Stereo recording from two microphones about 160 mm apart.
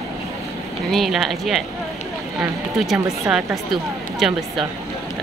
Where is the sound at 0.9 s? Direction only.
Centre (ahead or behind).